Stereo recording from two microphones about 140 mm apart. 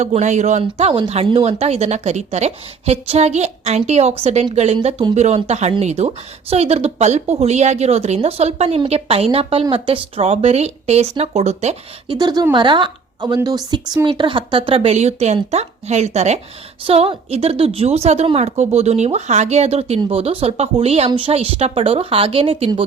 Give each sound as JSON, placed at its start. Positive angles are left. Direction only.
{"t": 0.0, "sound": "speech", "side_deg": -55}
{"t": 0.6, "sound": "speech", "side_deg": -40}
{"t": 12.0, "sound": "a woman's voice", "side_deg": -30}